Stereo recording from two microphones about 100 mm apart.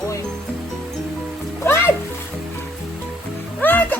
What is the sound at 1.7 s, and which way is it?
Music, 25° left (ahead or behind).